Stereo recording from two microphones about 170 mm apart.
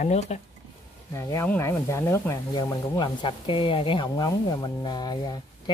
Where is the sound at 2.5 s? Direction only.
25° left (ahead or behind).